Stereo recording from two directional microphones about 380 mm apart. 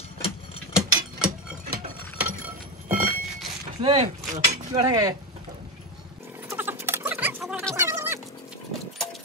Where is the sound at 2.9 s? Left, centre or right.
Right.